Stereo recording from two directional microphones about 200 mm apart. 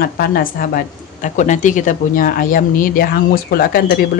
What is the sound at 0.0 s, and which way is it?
Speech, 50° left (ahead or behind).